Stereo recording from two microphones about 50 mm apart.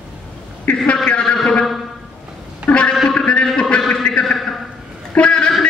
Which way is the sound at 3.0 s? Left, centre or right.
Centre.